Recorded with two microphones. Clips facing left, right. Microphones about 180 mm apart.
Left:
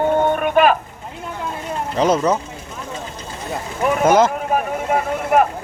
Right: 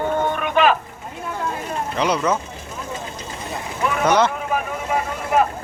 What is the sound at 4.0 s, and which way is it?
Speech, 45° left (ahead or behind).